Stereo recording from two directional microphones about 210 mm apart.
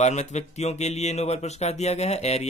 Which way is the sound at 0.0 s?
35° left (ahead or behind).